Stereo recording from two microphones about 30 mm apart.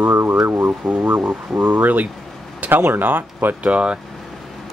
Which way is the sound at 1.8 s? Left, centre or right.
Right.